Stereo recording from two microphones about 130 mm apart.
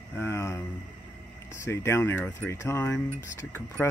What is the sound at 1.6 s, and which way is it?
Speech, 20° left (ahead or behind).